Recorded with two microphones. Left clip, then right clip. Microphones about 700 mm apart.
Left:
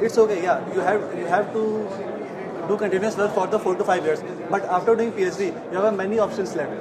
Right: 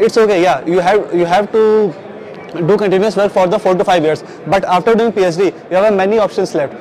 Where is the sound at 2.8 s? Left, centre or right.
Right.